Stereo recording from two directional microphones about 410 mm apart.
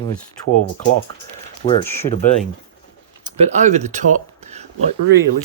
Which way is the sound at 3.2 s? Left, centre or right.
Centre.